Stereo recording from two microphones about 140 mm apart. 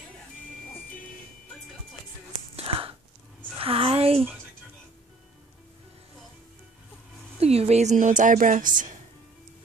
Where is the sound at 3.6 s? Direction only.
40° right (ahead or behind).